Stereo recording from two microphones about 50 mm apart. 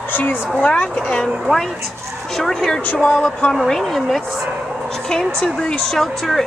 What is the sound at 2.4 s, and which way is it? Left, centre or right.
A woman's voice, centre.